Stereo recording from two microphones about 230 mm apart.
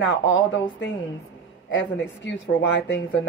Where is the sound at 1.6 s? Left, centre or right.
Left.